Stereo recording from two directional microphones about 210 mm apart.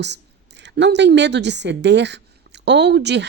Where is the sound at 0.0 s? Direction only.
55° right (ahead or behind).